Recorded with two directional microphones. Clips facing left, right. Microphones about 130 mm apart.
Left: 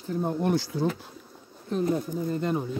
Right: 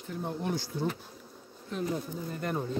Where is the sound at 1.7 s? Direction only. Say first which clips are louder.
Left 7 dB; 40° left (ahead or behind).